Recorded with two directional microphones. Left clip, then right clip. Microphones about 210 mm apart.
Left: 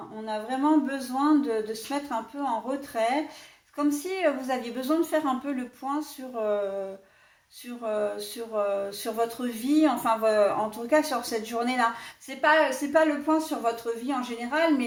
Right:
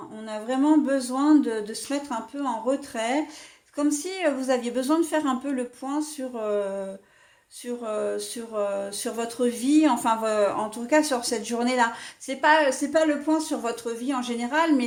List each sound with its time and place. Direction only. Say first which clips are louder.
0.3 s speech: right 2 dB; 45° right (ahead or behind)
7.9 s speech: even; 50° right (ahead or behind)